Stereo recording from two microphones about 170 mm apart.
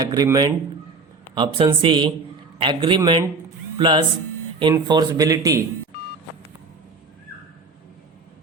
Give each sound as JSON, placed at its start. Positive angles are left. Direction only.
{"t": 0.0, "sound": "speech", "side_deg": -20}